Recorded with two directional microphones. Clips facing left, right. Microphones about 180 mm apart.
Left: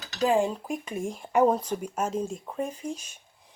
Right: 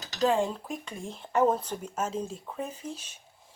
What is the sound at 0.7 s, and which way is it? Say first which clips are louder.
Speech: left 6 dB; centre (ahead or behind).